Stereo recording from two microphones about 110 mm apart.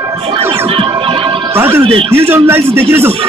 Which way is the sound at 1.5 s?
20° right (ahead or behind).